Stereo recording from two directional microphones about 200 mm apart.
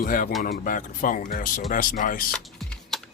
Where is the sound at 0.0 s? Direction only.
45° left (ahead or behind).